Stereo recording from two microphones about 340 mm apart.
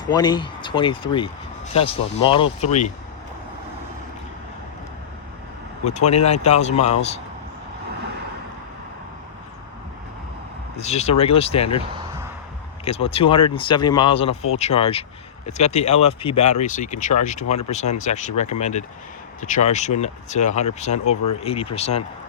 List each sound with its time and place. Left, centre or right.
0.0 s speech: centre
5.8 s speech: centre
10.8 s speech: centre
12.8 s speech: centre